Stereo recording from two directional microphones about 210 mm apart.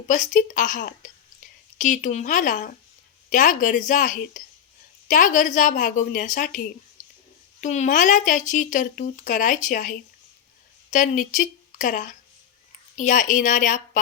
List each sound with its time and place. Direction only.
0.1 s speech: 35° left (ahead or behind)
7.6 s speech: 35° left (ahead or behind)
10.9 s a woman's voice: 35° left (ahead or behind)